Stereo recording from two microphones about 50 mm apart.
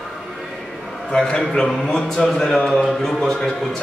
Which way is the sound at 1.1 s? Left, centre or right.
Centre.